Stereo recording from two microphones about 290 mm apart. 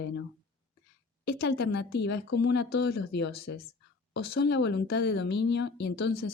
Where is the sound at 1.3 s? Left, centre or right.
Left.